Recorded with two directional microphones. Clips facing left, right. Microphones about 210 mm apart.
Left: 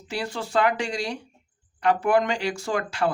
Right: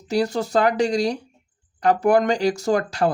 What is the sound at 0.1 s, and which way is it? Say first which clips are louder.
Speech: right 7 dB; 40° right (ahead or behind).